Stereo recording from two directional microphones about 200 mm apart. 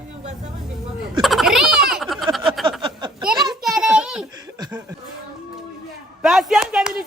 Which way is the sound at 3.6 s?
Centre (ahead or behind).